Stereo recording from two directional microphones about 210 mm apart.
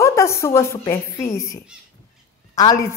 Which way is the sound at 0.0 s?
15° left (ahead or behind).